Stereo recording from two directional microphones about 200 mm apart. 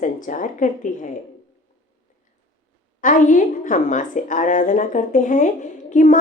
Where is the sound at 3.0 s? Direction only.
40° left (ahead or behind).